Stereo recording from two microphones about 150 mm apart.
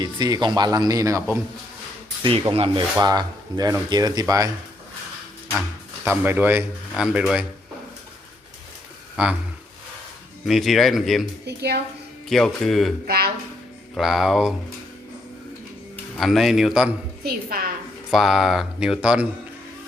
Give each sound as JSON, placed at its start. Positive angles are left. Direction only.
{"t": 0.0, "sound": "speech", "side_deg": -30}
{"t": 2.5, "sound": "speech", "side_deg": -40}
{"t": 3.0, "sound": "speech", "side_deg": -25}
{"t": 6.1, "sound": "speech", "side_deg": -10}
{"t": 9.2, "sound": "speech", "side_deg": -10}
{"t": 10.4, "sound": "speech", "side_deg": 0}
{"t": 11.4, "sound": "a woman's voice", "side_deg": -90}
{"t": 12.3, "sound": "speech", "side_deg": 0}
{"t": 13.1, "sound": "a woman's voice", "side_deg": -90}
{"t": 13.9, "sound": "speech", "side_deg": 0}
{"t": 16.1, "sound": "speech", "side_deg": 0}
{"t": 17.2, "sound": "a woman's voice", "side_deg": -80}
{"t": 18.1, "sound": "speech", "side_deg": -5}